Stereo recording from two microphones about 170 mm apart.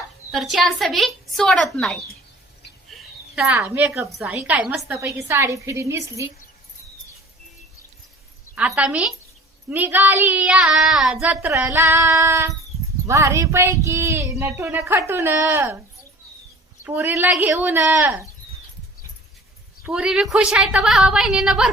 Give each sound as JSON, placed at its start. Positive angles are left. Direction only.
{"t": 0.3, "sound": "a woman's voice", "side_deg": 0}
{"t": 2.9, "sound": "a sound", "side_deg": -5}
{"t": 3.6, "sound": "child singing", "side_deg": -10}
{"t": 8.5, "sound": "a woman's voice", "side_deg": -5}
{"t": 9.6, "sound": "child singing", "side_deg": -10}
{"t": 16.8, "sound": "child singing", "side_deg": -10}
{"t": 19.9, "sound": "a woman's voice", "side_deg": -5}